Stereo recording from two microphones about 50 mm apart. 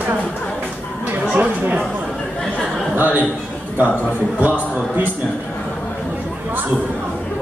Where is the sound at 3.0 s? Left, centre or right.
Right.